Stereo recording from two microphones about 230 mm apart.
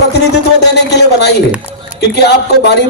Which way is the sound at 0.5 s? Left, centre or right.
Left.